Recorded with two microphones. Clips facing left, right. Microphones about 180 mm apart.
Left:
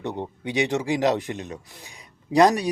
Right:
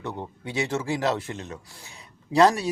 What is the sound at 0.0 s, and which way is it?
A man's voice, 20° left (ahead or behind).